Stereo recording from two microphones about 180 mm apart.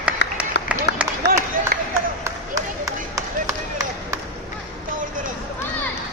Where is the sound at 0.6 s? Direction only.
70° left (ahead or behind).